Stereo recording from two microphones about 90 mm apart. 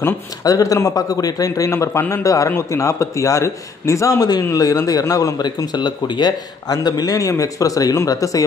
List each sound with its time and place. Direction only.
0.4 s a man's voice: 40° left (ahead or behind)